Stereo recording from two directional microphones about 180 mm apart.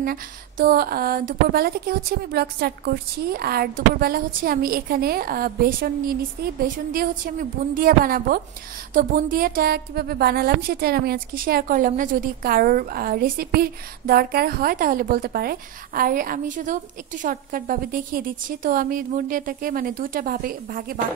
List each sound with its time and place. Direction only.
0.0 s a woman's voice: 55° right (ahead or behind)